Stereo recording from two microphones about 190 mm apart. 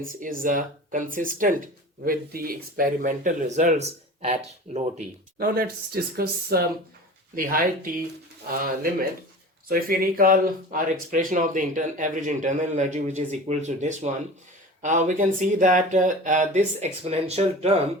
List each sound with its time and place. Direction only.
0.0 s speech: 45° right (ahead or behind)
5.4 s speech: 50° right (ahead or behind); by 17.7 s 35° right (ahead or behind)